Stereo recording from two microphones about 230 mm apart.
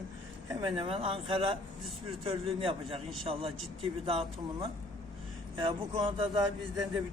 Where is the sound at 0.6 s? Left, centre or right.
Right.